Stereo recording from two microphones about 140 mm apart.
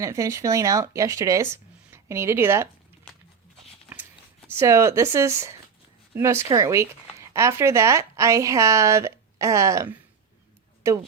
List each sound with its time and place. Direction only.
0.0 s speech: 20° right (ahead or behind)
4.5 s speech: 20° right (ahead or behind)